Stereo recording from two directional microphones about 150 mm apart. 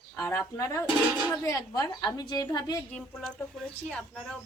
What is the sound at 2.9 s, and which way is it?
A woman's voice, 5° left (ahead or behind).